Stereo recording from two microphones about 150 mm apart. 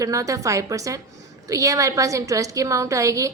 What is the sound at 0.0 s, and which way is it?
A woman's voice, 20° right (ahead or behind).